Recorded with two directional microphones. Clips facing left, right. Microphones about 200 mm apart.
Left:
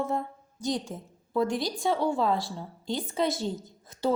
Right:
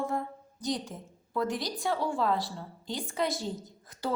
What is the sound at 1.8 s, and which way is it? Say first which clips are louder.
A woman's voice: left 4 dB; 25° left (ahead or behind).